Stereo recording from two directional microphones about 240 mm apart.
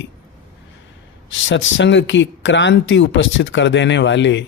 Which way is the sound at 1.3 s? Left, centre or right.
Left.